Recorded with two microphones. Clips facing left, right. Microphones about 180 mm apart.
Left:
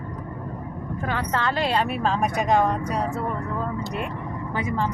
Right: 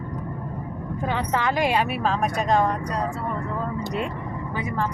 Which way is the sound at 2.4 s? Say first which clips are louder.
Left 1 dB; 15° left (ahead or behind).